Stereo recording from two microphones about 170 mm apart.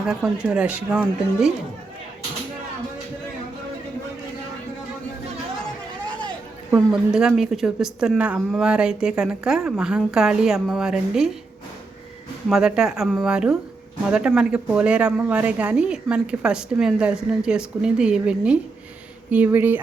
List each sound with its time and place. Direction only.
0.0 s speech: 5° right (ahead or behind)
6.7 s speech: 5° right (ahead or behind)
12.5 s speech: 5° right (ahead or behind)